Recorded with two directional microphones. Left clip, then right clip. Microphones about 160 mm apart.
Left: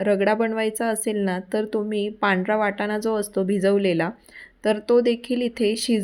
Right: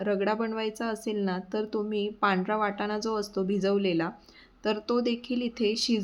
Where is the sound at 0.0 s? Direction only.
25° left (ahead or behind).